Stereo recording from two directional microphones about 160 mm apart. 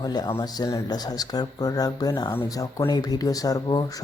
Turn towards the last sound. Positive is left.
turn(degrees=25)  # may be behind; listen again after turning